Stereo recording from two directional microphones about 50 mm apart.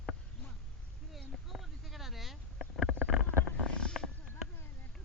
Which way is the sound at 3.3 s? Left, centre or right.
Right.